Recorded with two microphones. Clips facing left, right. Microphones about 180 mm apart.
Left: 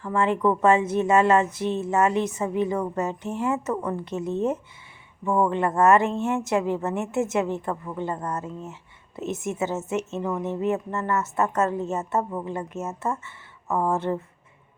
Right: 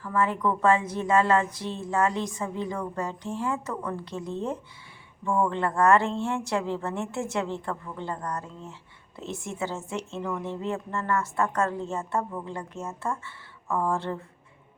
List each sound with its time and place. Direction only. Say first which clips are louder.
0.0 s a woman's voice: left 4 dB; 25° left (ahead or behind)